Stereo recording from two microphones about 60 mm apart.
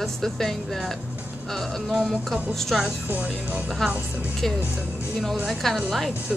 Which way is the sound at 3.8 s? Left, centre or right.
Centre.